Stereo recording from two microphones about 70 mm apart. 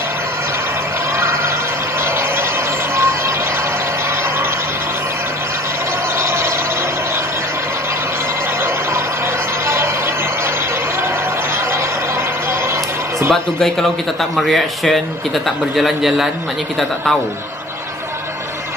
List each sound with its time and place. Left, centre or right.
1.1 s a sound: right
3.0 s vehicle: right
6.1 s vehicle: right
13.3 s a man's voice: centre